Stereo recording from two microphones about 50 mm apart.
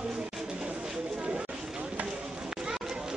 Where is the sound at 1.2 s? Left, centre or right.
Centre.